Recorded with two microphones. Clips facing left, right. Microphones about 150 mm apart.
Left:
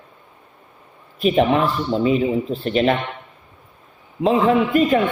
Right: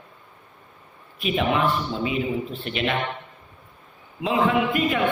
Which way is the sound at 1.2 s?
40° left (ahead or behind).